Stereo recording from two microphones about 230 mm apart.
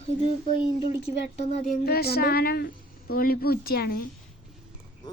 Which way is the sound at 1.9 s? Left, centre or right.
Left.